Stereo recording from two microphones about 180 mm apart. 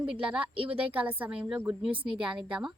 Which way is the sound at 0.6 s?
30° right (ahead or behind).